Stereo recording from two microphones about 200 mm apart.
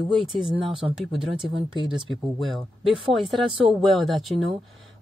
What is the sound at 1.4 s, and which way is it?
Speech, 25° right (ahead or behind).